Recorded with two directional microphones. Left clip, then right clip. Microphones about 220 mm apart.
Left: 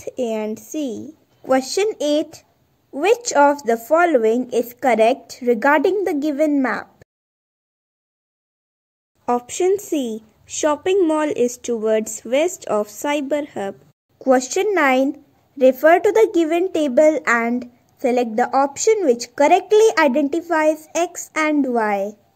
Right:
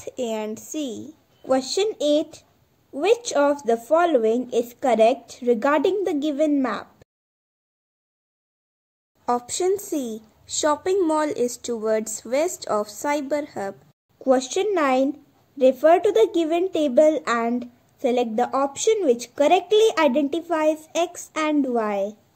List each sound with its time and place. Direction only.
0.0 s a woman's voice: 5° left (ahead or behind)
3.3 s a woman's voice: 5° left (ahead or behind)
9.6 s a woman's voice: 10° left (ahead or behind)
9.9 s a woman's voice: 25° left (ahead or behind)
10.6 s a woman's voice: 10° left (ahead or behind)
18.9 s a woman's voice: 5° left (ahead or behind)